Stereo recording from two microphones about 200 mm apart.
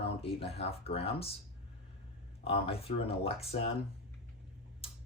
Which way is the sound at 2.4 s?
30° left (ahead or behind).